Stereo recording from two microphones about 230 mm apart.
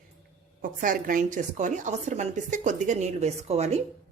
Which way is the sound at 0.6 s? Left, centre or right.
Right.